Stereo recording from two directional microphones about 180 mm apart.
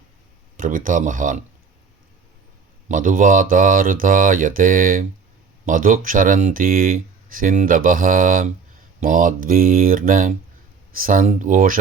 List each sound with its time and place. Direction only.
0.5 s speech: 45° right (ahead or behind)
2.9 s speech: 45° right (ahead or behind)